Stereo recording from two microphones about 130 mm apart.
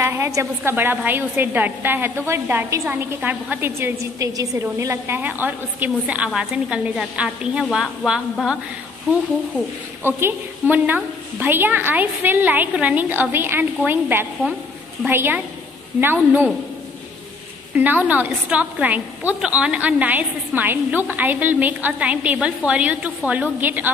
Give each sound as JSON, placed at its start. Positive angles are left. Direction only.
{"t": 0.0, "sound": "a woman's voice", "side_deg": -20}
{"t": 10.0, "sound": "a woman's voice", "side_deg": -15}
{"t": 17.7, "sound": "a woman's voice", "side_deg": -15}